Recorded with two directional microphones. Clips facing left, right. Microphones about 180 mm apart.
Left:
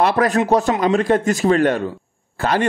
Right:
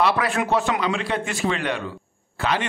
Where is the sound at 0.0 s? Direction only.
45° left (ahead or behind).